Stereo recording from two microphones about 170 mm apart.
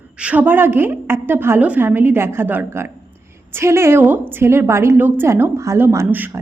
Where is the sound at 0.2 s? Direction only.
10° right (ahead or behind).